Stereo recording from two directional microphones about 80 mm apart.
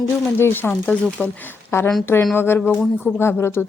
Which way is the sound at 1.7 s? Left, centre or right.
Left.